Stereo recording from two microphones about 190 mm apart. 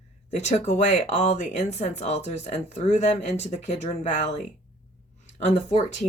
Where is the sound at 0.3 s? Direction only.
35° left (ahead or behind).